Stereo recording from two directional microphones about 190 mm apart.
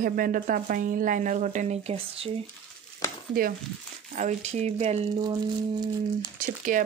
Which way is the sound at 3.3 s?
50° right (ahead or behind).